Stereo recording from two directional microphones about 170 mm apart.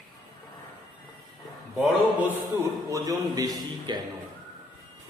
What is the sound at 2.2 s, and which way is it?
A man's voice, 15° right (ahead or behind).